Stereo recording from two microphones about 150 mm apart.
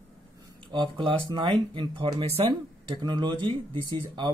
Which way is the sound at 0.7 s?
30° right (ahead or behind).